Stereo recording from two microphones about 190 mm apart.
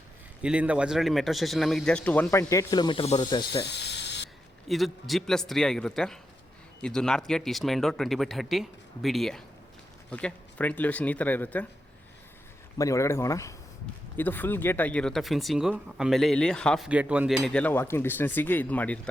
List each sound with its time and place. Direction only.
0.4 s speech: 5° right (ahead or behind); by 3.7 s 25° left (ahead or behind)
3.7 s a sound: 65° left (ahead or behind)
4.7 s speech: centre (ahead or behind)
12.8 s speech: 15° left (ahead or behind)